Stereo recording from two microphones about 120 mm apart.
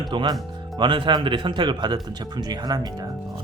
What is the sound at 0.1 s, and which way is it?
Speech, 40° right (ahead or behind).